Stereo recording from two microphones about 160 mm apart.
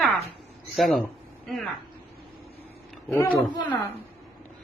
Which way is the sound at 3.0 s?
15° left (ahead or behind).